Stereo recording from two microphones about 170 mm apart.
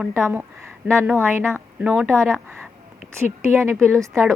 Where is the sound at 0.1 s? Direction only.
15° right (ahead or behind).